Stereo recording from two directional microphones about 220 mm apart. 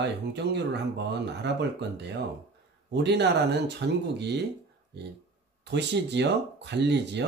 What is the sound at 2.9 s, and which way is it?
Speech, 50° right (ahead or behind).